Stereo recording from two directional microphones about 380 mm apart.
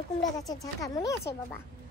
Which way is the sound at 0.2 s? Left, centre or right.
Centre.